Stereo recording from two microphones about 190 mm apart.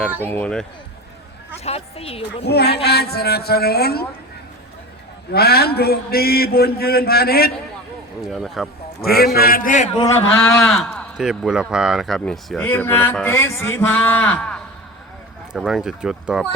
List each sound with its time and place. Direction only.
0.3 s speech: 10° left (ahead or behind)
1.6 s a woman's voice: 30° left (ahead or behind)
2.5 s a man's voice: 60° left (ahead or behind)
5.3 s a man's voice: 55° left (ahead or behind)
8.3 s speech: centre (ahead or behind)
9.0 s a man's voice: 55° left (ahead or behind)
10.5 s speech: 5° left (ahead or behind)